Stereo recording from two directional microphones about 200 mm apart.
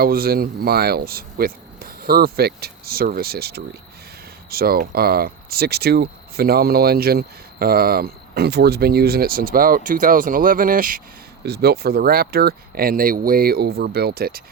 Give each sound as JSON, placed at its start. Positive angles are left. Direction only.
{"t": 0.0, "sound": "speech", "side_deg": -50}
{"t": 11.4, "sound": "speech", "side_deg": -55}